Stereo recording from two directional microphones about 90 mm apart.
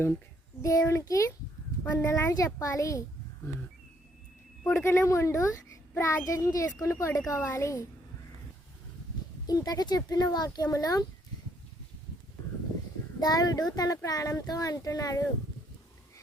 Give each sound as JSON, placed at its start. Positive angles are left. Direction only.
{"t": 0.6, "sound": "a child's voice", "side_deg": 35}
{"t": 4.6, "sound": "a child's voice", "side_deg": 30}
{"t": 9.5, "sound": "speech", "side_deg": 45}
{"t": 13.1, "sound": "speech", "side_deg": 45}